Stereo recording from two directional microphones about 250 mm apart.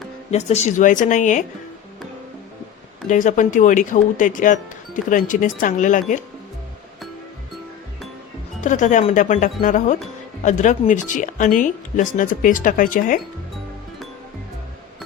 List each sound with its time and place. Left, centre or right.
0.3 s speech: left
3.1 s speech: left
8.6 s speech: left